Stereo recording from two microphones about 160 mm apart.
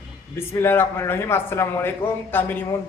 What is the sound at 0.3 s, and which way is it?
A man's voice, 15° left (ahead or behind).